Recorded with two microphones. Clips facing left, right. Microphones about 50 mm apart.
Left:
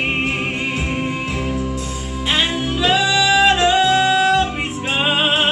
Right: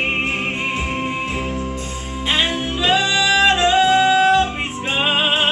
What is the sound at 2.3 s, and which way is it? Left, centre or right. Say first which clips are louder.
Music: left 1 dB; centre.